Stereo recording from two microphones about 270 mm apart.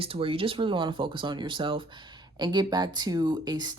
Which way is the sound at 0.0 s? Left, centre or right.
Centre.